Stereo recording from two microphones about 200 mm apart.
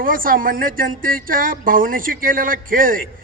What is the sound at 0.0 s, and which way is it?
Speech, 45° right (ahead or behind).